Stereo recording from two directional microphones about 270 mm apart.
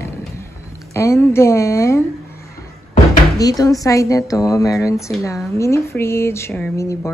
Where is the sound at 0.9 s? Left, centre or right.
Centre.